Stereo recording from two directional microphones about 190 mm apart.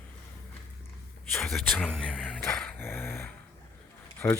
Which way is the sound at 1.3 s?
Centre (ahead or behind).